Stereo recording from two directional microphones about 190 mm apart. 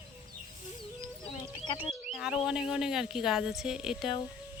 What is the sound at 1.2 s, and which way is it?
Music, 25° left (ahead or behind).